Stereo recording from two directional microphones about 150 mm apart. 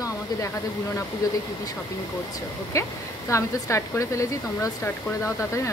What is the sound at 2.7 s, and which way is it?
Speech, 20° left (ahead or behind).